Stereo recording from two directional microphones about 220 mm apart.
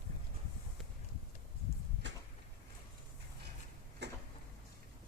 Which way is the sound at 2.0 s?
55° right (ahead or behind).